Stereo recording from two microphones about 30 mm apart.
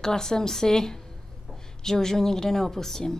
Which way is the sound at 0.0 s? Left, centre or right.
Centre.